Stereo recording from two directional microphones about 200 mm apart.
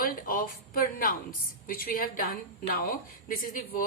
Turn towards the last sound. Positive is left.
turn(degrees=45)  # may be behind; listen again after turning